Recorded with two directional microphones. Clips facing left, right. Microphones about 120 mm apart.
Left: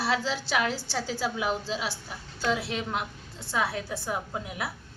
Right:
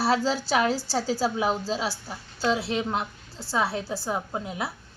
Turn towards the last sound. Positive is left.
turn(degrees=-30)  # may be behind; listen again after turning